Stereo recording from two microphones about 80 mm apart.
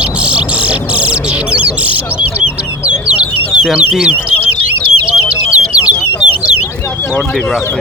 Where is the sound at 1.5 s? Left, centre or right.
Centre.